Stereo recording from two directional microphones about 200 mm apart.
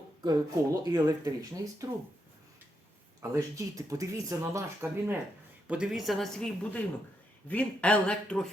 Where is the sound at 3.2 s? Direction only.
15° right (ahead or behind).